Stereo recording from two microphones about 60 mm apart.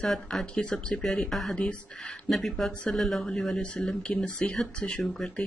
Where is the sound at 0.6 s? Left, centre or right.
Centre.